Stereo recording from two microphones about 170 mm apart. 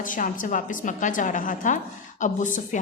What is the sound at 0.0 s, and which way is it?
A woman's voice, 50° left (ahead or behind).